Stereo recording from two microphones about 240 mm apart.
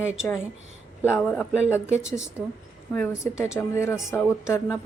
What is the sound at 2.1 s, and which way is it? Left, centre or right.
Speech, centre.